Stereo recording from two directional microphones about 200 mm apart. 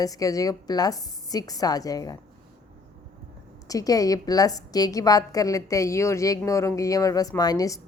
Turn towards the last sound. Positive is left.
turn(degrees=20)  # may be behind; listen again after turning